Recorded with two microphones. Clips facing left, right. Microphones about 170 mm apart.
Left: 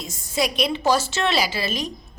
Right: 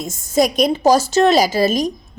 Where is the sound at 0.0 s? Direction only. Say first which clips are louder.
Right 8 dB; 50° right (ahead or behind).